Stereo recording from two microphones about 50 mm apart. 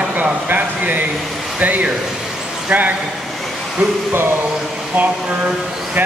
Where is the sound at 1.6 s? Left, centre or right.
Right.